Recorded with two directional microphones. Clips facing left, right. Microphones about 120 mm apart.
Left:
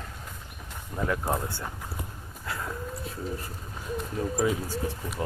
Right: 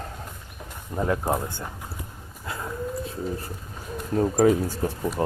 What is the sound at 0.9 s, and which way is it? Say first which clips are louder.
Speech: right 4 dB; 25° right (ahead or behind).